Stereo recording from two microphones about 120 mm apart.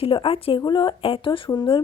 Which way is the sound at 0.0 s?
50° left (ahead or behind).